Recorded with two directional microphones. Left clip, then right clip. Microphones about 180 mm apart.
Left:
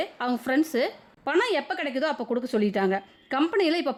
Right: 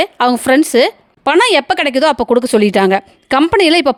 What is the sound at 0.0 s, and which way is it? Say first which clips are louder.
Speech: right 16 dB; 50° right (ahead or behind).